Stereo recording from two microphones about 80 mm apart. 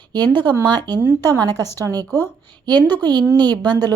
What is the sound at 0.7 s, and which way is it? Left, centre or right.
A woman's voice, right.